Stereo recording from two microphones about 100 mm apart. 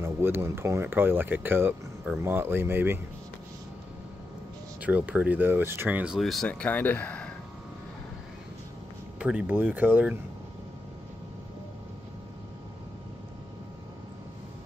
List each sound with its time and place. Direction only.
0.0 s speech: 25° right (ahead or behind)
4.8 s speech: 15° right (ahead or behind)
6.1 s speech: centre (ahead or behind)
6.6 s speech: 20° left (ahead or behind)
9.2 s speech: 10° right (ahead or behind)